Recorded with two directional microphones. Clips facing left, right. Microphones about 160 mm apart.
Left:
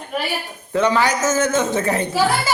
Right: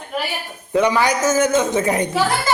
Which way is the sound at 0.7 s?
15° right (ahead or behind).